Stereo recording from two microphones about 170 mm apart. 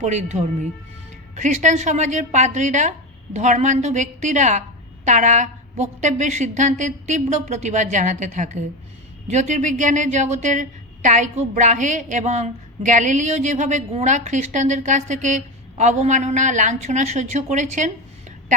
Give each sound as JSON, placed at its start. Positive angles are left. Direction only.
{"t": 0.0, "sound": "a woman's voice", "side_deg": -45}